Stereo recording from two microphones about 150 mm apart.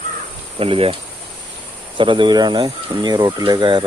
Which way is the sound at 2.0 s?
35° right (ahead or behind).